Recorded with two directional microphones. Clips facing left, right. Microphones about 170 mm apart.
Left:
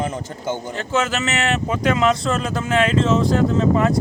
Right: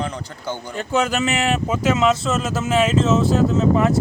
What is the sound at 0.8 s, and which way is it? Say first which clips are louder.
Speech: right 3 dB; 15° right (ahead or behind).